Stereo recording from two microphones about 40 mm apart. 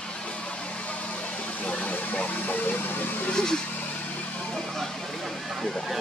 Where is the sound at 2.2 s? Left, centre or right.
Left.